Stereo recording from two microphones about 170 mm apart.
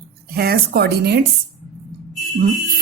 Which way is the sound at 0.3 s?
65° right (ahead or behind).